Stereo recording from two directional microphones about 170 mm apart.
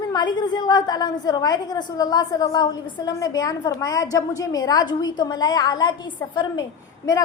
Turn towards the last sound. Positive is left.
turn(degrees=20)  # may be behind; listen again after turning